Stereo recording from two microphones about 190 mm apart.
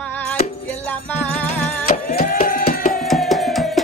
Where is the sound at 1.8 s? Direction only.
50° left (ahead or behind).